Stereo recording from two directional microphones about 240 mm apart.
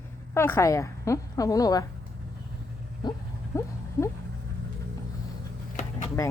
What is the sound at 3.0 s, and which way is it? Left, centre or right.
Speech, centre.